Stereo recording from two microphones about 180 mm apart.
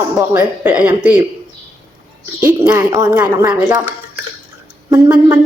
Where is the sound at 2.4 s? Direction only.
15° right (ahead or behind).